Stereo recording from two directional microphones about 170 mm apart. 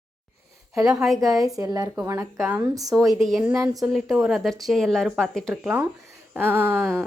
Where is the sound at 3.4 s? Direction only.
10° right (ahead or behind).